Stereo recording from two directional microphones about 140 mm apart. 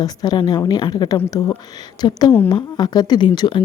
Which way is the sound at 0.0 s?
30° left (ahead or behind).